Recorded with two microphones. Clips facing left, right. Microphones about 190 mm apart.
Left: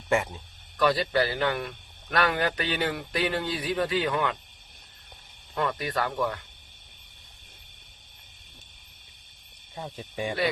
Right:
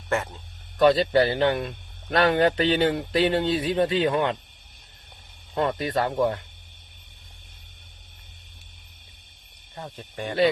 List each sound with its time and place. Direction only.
0.1 s speech: 15° left (ahead or behind)
0.8 s a man's voice: 25° right (ahead or behind)
5.5 s a man's voice: 25° right (ahead or behind)
9.7 s speech: 5° left (ahead or behind)